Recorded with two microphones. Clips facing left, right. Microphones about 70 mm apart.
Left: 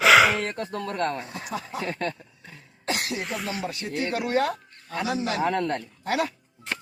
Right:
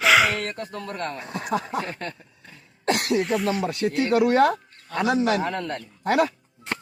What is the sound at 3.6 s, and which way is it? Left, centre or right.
Speech, right.